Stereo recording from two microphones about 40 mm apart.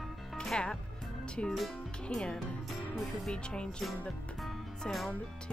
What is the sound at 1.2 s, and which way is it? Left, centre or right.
Speech, left.